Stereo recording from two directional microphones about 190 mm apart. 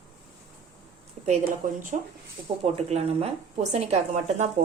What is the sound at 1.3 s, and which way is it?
A woman's voice, 40° right (ahead or behind).